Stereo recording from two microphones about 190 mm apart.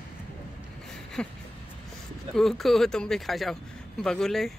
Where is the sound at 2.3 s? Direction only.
Centre (ahead or behind).